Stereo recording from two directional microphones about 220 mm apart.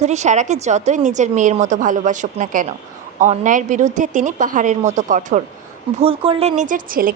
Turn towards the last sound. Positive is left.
turn(degrees=-40)  # may be behind; listen again after turning